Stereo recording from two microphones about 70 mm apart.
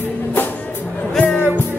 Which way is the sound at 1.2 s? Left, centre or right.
Centre.